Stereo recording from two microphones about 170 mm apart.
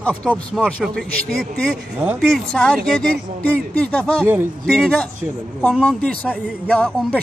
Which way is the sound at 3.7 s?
5° left (ahead or behind).